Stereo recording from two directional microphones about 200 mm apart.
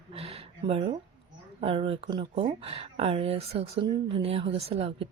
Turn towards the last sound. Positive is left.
turn(degrees=-30)  # may be behind; listen again after turning